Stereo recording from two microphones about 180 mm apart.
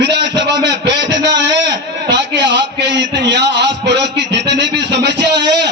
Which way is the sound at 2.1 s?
75° right (ahead or behind).